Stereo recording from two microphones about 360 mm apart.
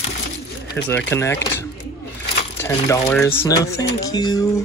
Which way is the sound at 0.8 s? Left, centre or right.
Centre.